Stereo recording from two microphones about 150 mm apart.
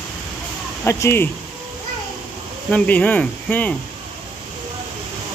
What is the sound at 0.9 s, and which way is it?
Speech, 20° left (ahead or behind).